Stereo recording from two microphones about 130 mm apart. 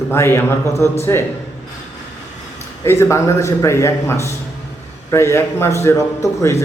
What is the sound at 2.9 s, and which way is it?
A man's voice, 20° left (ahead or behind).